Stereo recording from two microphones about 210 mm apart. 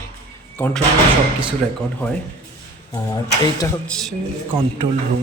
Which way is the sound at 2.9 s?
15° left (ahead or behind).